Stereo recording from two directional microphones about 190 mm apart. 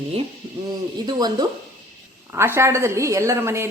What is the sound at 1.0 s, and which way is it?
A woman's voice, 20° right (ahead or behind).